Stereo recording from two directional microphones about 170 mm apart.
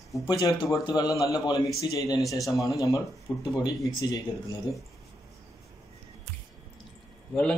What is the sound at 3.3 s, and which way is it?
Speech, 20° left (ahead or behind).